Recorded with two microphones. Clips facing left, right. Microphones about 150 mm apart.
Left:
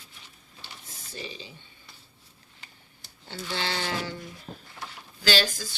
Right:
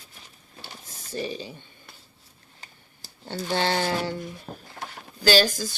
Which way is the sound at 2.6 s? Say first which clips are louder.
Right 4 dB; 40° right (ahead or behind).